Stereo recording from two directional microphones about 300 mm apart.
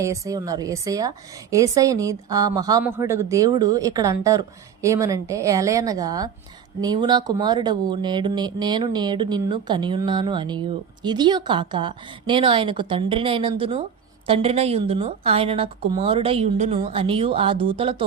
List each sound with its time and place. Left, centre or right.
0.0 s a woman's voice: centre